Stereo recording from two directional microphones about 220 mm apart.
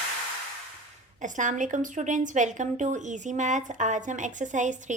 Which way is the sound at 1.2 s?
35° right (ahead or behind).